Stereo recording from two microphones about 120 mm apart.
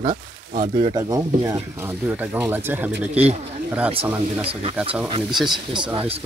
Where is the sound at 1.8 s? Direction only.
15° right (ahead or behind).